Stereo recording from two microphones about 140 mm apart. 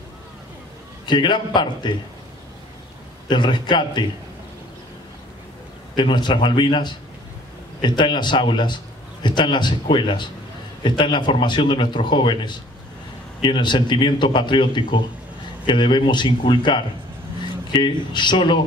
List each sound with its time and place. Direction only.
1.0 s a man's voice: 35° left (ahead or behind)
3.3 s a man's voice: 35° left (ahead or behind)
5.9 s a man's voice: 35° left (ahead or behind)